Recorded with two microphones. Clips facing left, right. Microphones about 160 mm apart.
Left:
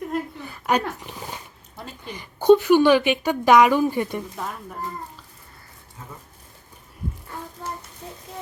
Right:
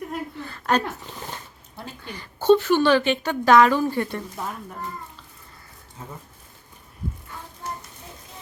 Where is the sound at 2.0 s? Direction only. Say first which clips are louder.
Left 2 dB; 15° left (ahead or behind).